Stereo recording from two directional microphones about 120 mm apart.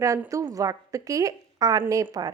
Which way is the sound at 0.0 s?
25° right (ahead or behind).